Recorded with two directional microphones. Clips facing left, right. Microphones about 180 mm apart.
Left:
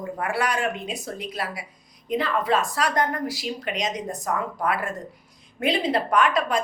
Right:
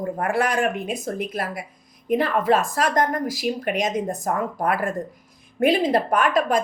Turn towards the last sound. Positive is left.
turn(degrees=-50)  # may be behind; listen again after turning